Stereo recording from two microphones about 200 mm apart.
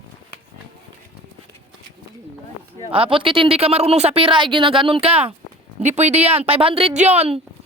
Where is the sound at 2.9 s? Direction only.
25° right (ahead or behind).